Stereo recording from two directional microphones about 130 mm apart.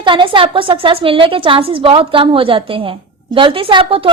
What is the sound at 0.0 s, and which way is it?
A woman's voice, 40° right (ahead or behind).